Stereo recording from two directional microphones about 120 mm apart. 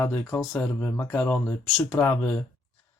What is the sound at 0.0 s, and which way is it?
Speech, 20° left (ahead or behind).